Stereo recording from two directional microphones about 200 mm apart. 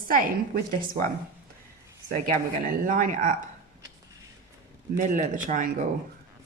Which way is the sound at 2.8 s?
40° right (ahead or behind).